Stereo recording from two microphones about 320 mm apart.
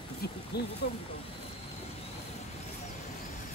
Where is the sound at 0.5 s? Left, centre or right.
Left.